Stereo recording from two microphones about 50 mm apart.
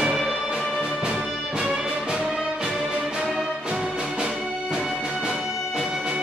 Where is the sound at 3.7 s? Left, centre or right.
Centre.